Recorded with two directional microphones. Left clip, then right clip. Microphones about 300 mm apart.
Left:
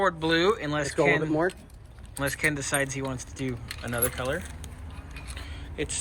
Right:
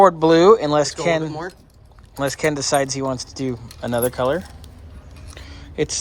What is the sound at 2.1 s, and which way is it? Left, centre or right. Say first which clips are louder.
Speech: right 6 dB; centre.